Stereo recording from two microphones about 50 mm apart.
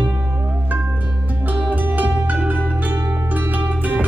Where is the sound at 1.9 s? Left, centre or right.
Right.